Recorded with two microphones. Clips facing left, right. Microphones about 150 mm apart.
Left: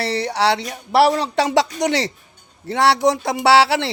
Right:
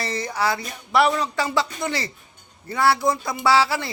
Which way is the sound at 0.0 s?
70° left (ahead or behind).